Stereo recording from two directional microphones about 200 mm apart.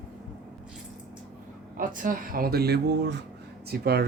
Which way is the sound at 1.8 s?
45° right (ahead or behind).